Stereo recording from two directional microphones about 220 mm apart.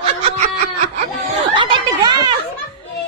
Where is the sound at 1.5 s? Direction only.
20° right (ahead or behind).